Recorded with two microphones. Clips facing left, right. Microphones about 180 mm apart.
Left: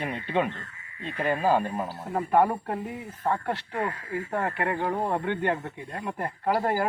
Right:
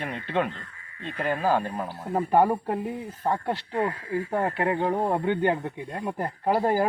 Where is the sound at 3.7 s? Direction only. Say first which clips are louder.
Right 7 dB; 25° right (ahead or behind).